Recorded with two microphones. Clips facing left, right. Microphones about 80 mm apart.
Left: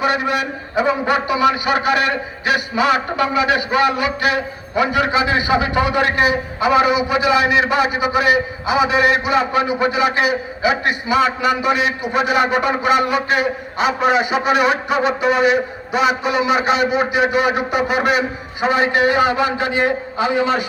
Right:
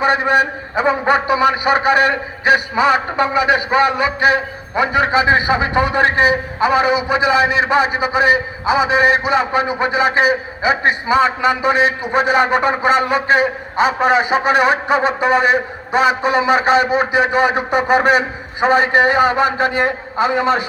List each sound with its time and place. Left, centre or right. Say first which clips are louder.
0.0 s a man's voice: right 4 dB; right